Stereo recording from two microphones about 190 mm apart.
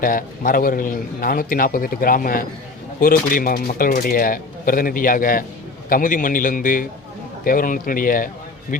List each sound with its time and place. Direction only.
0.0 s a man's voice: 45° left (ahead or behind)